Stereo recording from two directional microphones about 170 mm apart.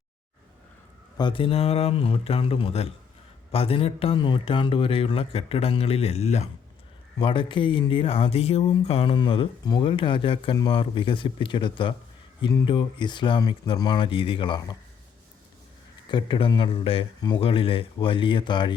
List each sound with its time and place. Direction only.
1.1 s speech: 30° left (ahead or behind)
16.0 s speech: 30° left (ahead or behind)